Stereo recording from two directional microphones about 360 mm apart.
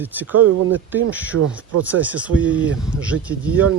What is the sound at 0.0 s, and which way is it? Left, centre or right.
Speech, centre.